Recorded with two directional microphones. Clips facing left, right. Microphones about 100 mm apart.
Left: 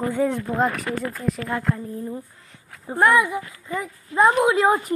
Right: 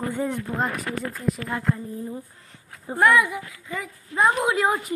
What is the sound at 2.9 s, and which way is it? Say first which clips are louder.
Speech: left 1 dB; 25° left (ahead or behind).